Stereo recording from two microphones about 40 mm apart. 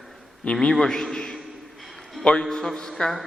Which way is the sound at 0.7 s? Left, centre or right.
Centre.